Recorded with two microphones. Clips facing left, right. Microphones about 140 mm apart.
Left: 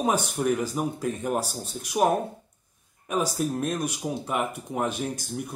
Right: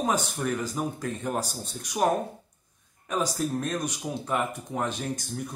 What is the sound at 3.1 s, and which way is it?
Speech, 10° left (ahead or behind).